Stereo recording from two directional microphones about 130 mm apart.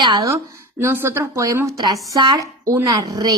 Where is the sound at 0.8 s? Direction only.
15° right (ahead or behind).